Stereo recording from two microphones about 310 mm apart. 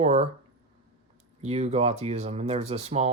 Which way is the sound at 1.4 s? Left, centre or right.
Right.